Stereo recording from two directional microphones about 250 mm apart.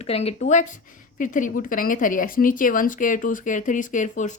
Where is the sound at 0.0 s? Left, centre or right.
Left.